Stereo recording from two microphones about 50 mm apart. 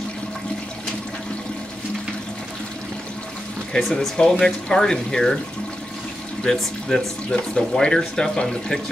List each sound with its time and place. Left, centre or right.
3.8 s speech: centre
4.2 s speech: centre
6.4 s speech: centre
7.2 s speech: centre